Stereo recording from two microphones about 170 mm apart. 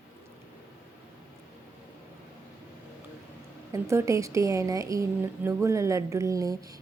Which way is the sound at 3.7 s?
15° right (ahead or behind).